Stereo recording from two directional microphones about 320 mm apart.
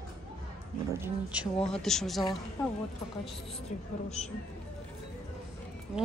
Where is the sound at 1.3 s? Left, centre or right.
Centre.